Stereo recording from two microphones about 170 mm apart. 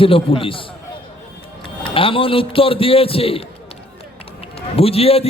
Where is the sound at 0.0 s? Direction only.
35° left (ahead or behind).